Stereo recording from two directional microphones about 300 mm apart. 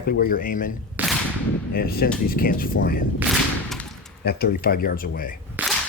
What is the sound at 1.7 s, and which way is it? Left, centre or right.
Speech, left.